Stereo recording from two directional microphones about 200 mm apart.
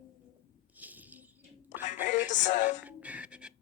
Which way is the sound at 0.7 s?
10° right (ahead or behind).